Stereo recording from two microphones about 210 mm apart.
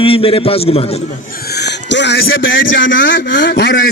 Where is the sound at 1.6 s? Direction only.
55° left (ahead or behind).